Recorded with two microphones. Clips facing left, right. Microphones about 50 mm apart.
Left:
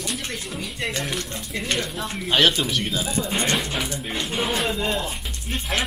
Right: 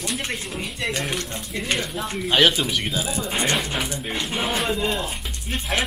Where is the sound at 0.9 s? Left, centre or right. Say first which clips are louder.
Right 2 dB; right.